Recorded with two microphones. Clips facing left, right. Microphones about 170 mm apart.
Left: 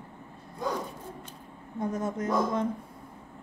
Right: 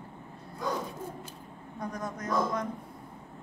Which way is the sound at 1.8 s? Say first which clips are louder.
Left 6 dB; 25° left (ahead or behind).